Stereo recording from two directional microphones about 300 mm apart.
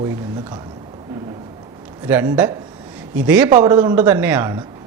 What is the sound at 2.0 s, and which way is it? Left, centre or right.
A man's voice, centre.